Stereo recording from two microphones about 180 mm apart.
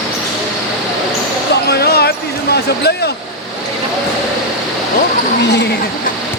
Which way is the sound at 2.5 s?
65° left (ahead or behind).